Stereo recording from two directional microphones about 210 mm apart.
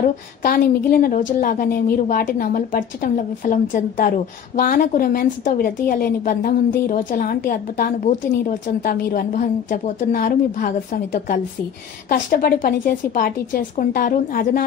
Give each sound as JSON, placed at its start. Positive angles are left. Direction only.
{"t": 0.0, "sound": "a woman's voice", "side_deg": 45}
{"t": 12.1, "sound": "a woman's voice", "side_deg": 45}